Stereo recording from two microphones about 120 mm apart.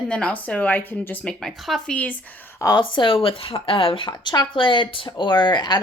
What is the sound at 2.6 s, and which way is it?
A woman's voice, 35° left (ahead or behind).